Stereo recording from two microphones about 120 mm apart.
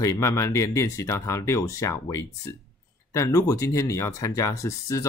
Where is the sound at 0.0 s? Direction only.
25° left (ahead or behind).